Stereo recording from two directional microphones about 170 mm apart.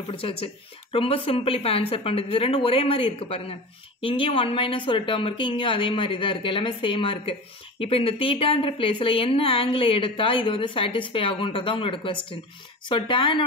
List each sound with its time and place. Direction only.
0.1 s a woman's voice: 30° left (ahead or behind)